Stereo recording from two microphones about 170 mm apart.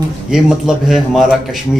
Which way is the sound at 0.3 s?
Centre (ahead or behind).